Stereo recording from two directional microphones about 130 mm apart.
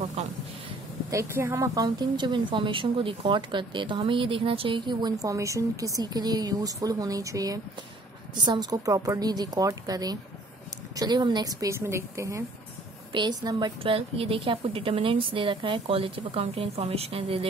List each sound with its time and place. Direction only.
0.0 s a sound: 60° right (ahead or behind)
1.1 s speech: 20° right (ahead or behind)
13.1 s speech: 35° right (ahead or behind)
13.9 s a woman's voice: 45° right (ahead or behind)